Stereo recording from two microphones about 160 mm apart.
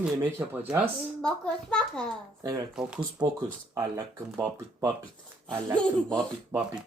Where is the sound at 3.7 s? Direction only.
20° right (ahead or behind).